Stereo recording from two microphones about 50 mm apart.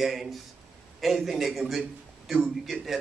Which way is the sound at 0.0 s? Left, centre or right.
Centre.